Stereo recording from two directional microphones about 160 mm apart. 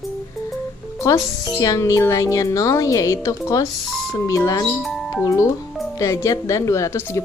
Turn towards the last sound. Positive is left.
turn(degrees=20)  # may be behind; listen again after turning